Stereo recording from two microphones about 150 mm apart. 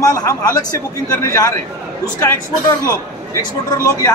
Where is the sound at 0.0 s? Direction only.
25° left (ahead or behind).